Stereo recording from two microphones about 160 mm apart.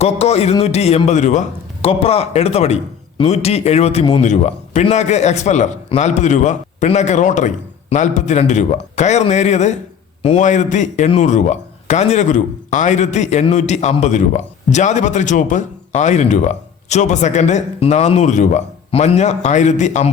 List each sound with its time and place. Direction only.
0.0 s a man's voice: 40° left (ahead or behind)